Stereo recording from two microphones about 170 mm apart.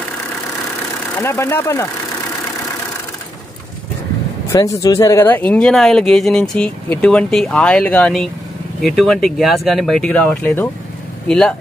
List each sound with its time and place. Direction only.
1.1 s speech: 15° left (ahead or behind)
4.5 s speech: 20° left (ahead or behind); by 11.5 s 5° left (ahead or behind)